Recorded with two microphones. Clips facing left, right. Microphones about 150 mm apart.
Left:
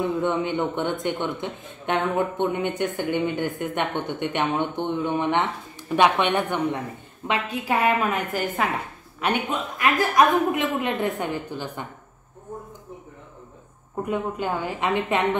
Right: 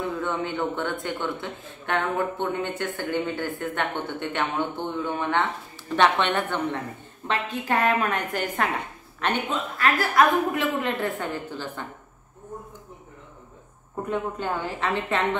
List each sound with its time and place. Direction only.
0.1 s a woman's voice: 20° left (ahead or behind); by 8.6 s 5° left (ahead or behind)
9.2 s speech: 15° left (ahead or behind)
14.0 s a woman's voice: 10° left (ahead or behind)